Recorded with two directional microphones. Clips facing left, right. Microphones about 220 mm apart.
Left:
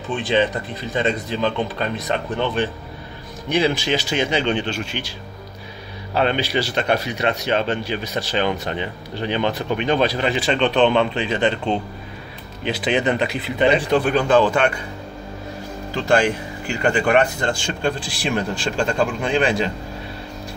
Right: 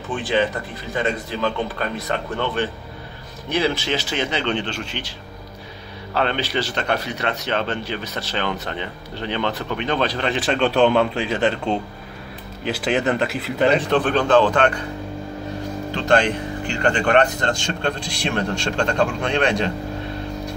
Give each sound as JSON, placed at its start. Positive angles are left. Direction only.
{"t": 0.1, "sound": "speech", "side_deg": 20}
{"t": 6.1, "sound": "speech", "side_deg": 15}
{"t": 13.7, "sound": "speech", "side_deg": 10}
{"t": 15.9, "sound": "speech", "side_deg": 10}